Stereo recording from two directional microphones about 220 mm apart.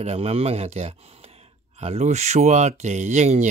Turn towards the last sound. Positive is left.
turn(degrees=-30)  # may be behind; listen again after turning